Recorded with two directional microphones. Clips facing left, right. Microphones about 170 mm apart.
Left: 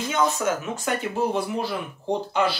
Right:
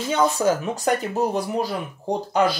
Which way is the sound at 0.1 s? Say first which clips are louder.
Right 4 dB; 35° right (ahead or behind).